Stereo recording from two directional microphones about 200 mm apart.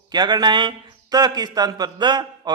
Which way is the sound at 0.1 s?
20° right (ahead or behind).